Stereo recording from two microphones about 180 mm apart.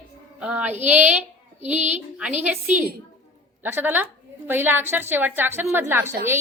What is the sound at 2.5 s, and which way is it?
A woman's voice, 10° right (ahead or behind).